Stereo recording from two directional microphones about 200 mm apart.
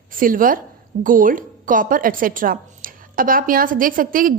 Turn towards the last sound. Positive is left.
turn(degrees=-45)  # may be behind; listen again after turning